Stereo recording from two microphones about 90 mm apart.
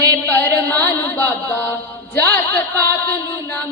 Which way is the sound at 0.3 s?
25° left (ahead or behind).